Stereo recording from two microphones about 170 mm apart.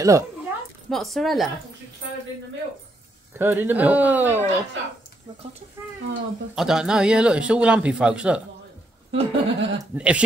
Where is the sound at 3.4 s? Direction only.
10° right (ahead or behind).